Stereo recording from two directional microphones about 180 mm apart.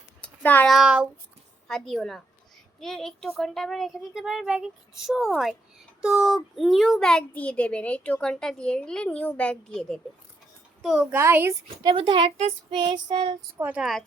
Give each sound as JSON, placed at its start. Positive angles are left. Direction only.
{"t": 0.2, "sound": "a child's voice", "side_deg": 10}
{"t": 11.8, "sound": "speech", "side_deg": -25}
{"t": 13.6, "sound": "a child's voice", "side_deg": -5}